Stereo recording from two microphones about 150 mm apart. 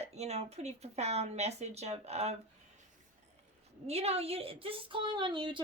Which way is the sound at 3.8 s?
45° right (ahead or behind).